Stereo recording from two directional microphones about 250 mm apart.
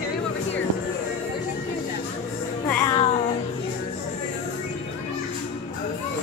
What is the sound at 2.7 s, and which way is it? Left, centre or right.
Music, centre.